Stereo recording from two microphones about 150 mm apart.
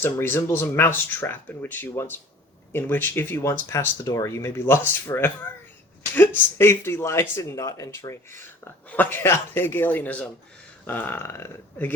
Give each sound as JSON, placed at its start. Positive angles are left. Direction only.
{"t": 0.0, "sound": "speech", "side_deg": 15}